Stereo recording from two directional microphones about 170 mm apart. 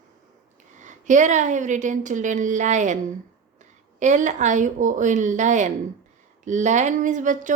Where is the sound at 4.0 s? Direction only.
45° right (ahead or behind).